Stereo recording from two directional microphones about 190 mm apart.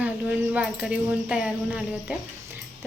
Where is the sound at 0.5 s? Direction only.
5° right (ahead or behind).